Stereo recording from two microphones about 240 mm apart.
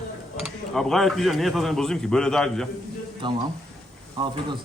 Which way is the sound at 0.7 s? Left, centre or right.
Centre.